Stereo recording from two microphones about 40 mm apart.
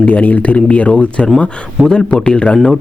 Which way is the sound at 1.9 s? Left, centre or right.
Left.